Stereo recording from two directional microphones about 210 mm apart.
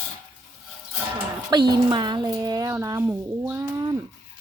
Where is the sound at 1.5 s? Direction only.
20° right (ahead or behind).